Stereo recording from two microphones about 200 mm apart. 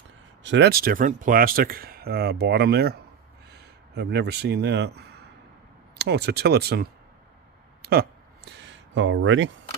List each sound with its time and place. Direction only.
0.4 s speech: 60° right (ahead or behind)
7.8 s a sound: 50° right (ahead or behind)
9.0 s speech: 70° right (ahead or behind)